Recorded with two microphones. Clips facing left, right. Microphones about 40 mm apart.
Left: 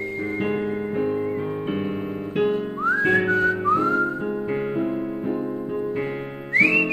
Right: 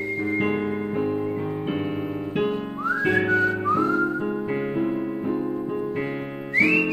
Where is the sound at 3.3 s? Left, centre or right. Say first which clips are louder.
Left 1 dB; centre.